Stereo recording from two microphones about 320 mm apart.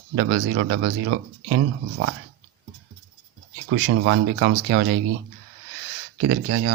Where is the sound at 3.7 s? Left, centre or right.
Right.